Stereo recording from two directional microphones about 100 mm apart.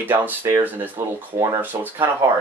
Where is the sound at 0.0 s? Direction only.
20° right (ahead or behind).